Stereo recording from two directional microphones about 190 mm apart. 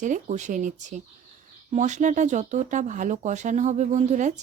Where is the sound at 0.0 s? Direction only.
40° right (ahead or behind).